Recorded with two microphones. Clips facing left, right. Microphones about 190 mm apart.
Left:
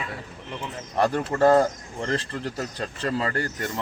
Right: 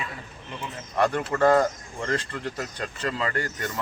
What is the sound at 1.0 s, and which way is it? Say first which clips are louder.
Speech: left 1 dB; 35° left (ahead or behind).